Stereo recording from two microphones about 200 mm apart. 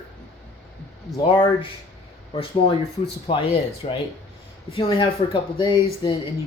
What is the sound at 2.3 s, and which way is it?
Speech, 30° left (ahead or behind).